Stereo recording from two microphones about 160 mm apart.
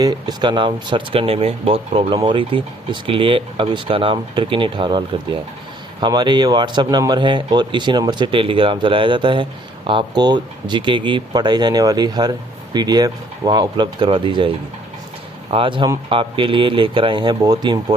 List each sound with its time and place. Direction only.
0.0 s speech: 25° right (ahead or behind)